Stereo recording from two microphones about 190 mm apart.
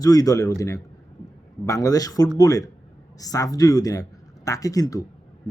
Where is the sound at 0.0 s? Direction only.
20° left (ahead or behind).